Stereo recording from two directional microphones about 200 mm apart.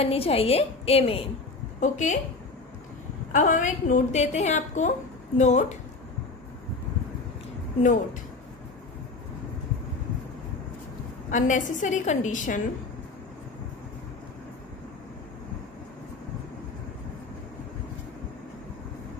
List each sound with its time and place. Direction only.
0.0 s a woman's voice: 30° left (ahead or behind)
3.3 s a woman's voice: 40° left (ahead or behind)
7.8 s a woman's voice: 40° left (ahead or behind)
11.2 s a woman's voice: 40° left (ahead or behind)